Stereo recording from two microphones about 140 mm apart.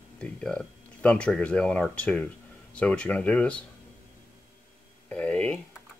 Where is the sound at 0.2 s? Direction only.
5° left (ahead or behind).